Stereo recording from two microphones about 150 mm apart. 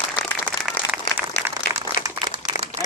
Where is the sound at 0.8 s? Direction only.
35° left (ahead or behind).